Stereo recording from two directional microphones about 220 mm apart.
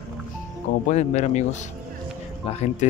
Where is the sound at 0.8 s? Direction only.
30° left (ahead or behind).